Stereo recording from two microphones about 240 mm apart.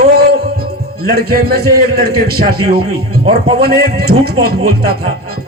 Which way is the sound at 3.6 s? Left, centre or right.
Right.